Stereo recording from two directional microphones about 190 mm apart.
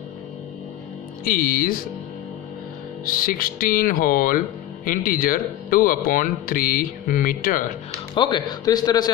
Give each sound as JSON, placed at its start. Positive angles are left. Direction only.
{"t": 1.2, "sound": "speech", "side_deg": 45}
{"t": 3.1, "sound": "speech", "side_deg": 50}
{"t": 8.1, "sound": "speech", "side_deg": 25}